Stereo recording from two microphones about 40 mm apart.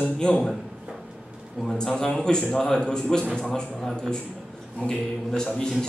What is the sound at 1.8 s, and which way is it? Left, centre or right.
A woman's voice, centre.